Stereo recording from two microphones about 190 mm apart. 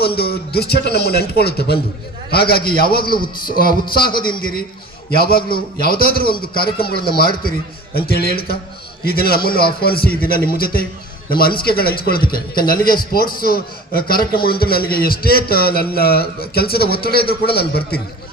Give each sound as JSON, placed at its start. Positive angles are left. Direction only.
{"t": 0.2, "sound": "a man's voice", "side_deg": 55}
{"t": 3.1, "sound": "a man's voice", "side_deg": 25}
{"t": 3.5, "sound": "a man's voice", "side_deg": 50}
{"t": 5.1, "sound": "a man's voice", "side_deg": 55}